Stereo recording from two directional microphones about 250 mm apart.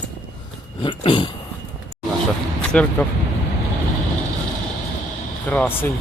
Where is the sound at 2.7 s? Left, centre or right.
Centre.